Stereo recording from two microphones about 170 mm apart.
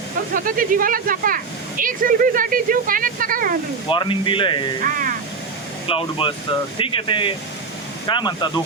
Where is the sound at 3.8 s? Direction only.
30° left (ahead or behind).